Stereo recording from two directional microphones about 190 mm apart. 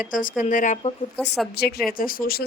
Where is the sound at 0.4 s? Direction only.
40° left (ahead or behind).